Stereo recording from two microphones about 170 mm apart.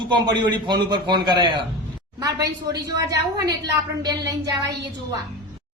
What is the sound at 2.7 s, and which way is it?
Speech, 20° right (ahead or behind).